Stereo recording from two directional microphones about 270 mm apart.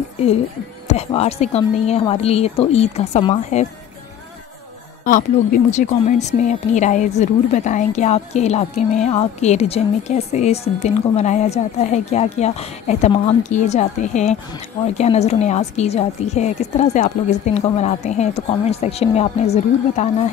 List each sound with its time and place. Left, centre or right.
0.8 s a woman's voice: left
5.0 s a woman's voice: left